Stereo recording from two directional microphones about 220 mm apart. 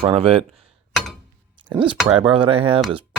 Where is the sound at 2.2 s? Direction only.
25° right (ahead or behind).